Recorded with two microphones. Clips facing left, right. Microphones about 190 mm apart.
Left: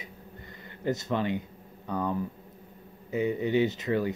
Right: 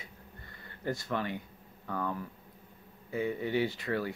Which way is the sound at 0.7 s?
20° left (ahead or behind).